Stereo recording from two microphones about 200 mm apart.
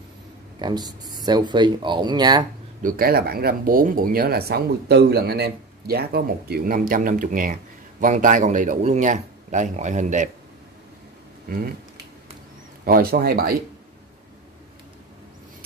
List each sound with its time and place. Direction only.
0.6 s speech: 20° right (ahead or behind)
2.8 s a man's voice: 45° right (ahead or behind)
12.8 s speech: 45° right (ahead or behind)